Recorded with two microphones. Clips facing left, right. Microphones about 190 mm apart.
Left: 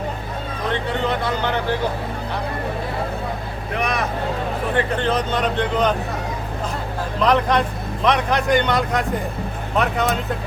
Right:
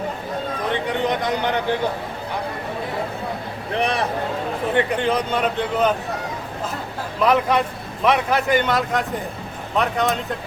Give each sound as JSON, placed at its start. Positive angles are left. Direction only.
{"t": 0.7, "sound": "speech", "side_deg": -15}
{"t": 3.8, "sound": "speech", "side_deg": -30}
{"t": 4.7, "sound": "a man's voice", "side_deg": -15}
{"t": 7.2, "sound": "a man's voice", "side_deg": -5}